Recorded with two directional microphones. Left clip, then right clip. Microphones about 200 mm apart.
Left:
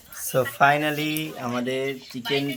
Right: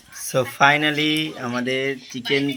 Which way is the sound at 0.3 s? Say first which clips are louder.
Right 2 dB; centre (ahead or behind).